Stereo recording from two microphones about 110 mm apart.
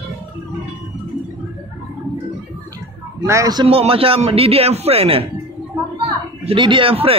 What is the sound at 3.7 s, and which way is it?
A man's voice, 60° right (ahead or behind).